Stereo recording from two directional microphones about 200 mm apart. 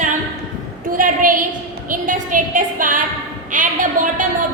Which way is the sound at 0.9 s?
40° right (ahead or behind).